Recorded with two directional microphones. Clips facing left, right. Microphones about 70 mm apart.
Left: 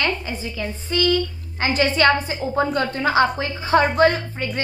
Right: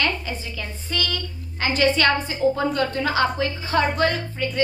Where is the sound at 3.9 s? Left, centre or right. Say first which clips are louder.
Left 5 dB; left.